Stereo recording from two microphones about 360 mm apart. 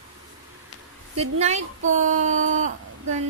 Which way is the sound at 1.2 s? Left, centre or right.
Centre.